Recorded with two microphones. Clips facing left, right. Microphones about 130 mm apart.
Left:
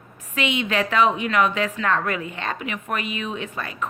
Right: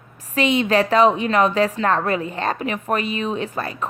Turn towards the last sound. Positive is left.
turn(degrees=-35)  # may be behind; listen again after turning